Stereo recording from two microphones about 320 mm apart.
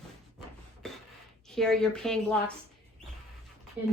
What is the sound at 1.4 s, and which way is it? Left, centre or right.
A woman's voice, centre.